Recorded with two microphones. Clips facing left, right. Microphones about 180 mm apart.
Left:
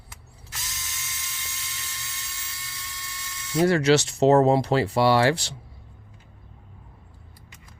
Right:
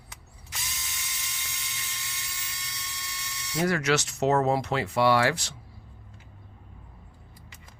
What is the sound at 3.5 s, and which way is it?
Speech, 25° left (ahead or behind).